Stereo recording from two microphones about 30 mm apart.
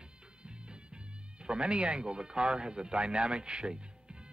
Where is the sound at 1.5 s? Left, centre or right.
Right.